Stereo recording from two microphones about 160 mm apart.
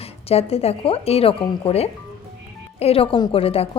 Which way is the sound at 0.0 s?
40° left (ahead or behind).